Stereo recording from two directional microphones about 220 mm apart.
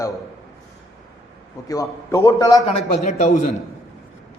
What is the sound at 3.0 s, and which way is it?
Speech, 35° left (ahead or behind).